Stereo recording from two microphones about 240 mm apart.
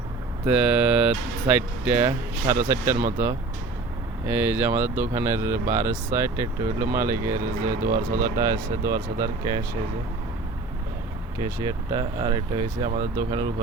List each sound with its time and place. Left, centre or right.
0.4 s speech: centre
2.9 s speech: right
4.3 s speech: centre
11.3 s speech: centre